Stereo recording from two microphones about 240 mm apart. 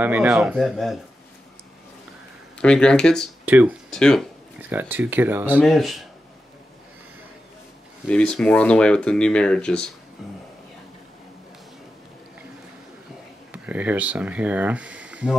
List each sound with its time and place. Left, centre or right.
0.0 s speech: centre
2.6 s speech: centre
4.6 s speech: centre
8.1 s speech: centre
13.5 s speech: centre